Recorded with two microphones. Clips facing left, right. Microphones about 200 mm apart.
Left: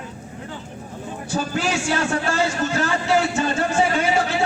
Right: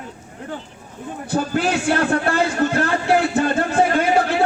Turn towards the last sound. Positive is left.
turn(degrees=-55)  # may be behind; listen again after turning